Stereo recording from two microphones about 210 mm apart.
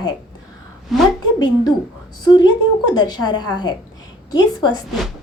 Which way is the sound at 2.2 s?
20° left (ahead or behind).